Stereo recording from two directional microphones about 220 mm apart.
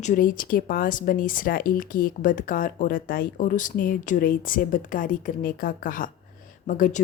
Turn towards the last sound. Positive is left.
turn(degrees=35)  # may be behind; listen again after turning